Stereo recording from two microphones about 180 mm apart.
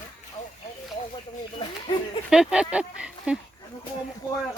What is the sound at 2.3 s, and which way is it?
Speech, 5° right (ahead or behind).